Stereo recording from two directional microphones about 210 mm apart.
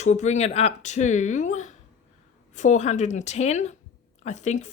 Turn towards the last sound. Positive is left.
turn(degrees=35)  # may be behind; listen again after turning